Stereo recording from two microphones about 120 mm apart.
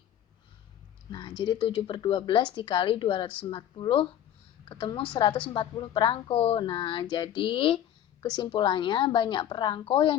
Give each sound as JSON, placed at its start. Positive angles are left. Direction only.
{"t": 1.4, "sound": "speech", "side_deg": 45}